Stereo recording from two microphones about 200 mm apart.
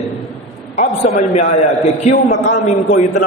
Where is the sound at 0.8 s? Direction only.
35° left (ahead or behind).